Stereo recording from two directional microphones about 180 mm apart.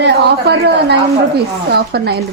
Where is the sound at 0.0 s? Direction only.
65° right (ahead or behind).